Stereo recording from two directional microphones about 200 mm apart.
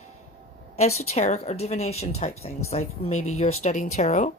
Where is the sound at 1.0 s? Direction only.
35° left (ahead or behind).